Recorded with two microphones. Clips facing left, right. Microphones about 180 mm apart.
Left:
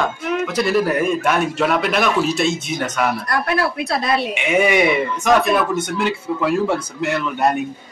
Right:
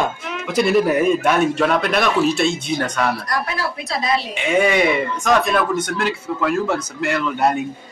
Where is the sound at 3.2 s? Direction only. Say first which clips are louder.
Left 4 dB; 60° left (ahead or behind).